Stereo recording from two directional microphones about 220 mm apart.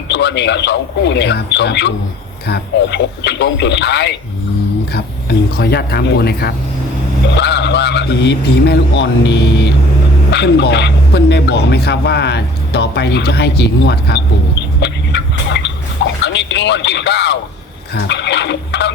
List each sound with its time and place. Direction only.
0.1 s a man's voice: 50° left (ahead or behind)